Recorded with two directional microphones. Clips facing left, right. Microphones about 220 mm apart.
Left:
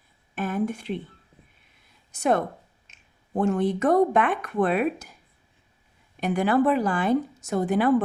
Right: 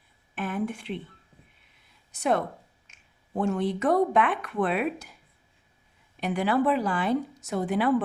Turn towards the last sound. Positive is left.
turn(degrees=45)  # may be behind; listen again after turning